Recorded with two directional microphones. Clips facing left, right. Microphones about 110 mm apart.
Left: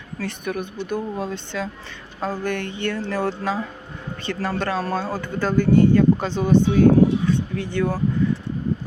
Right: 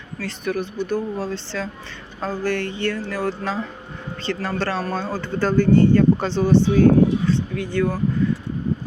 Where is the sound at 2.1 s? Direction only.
5° left (ahead or behind).